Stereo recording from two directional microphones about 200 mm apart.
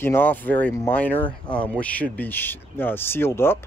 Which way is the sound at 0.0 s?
10° left (ahead or behind).